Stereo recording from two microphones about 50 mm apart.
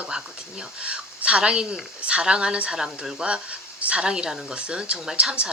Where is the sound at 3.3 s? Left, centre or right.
Right.